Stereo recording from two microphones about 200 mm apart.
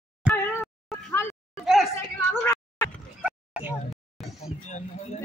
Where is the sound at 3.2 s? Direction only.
5° right (ahead or behind).